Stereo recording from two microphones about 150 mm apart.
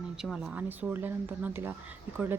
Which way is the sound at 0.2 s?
5° right (ahead or behind).